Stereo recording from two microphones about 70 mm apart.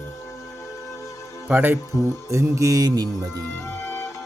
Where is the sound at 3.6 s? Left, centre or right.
Left.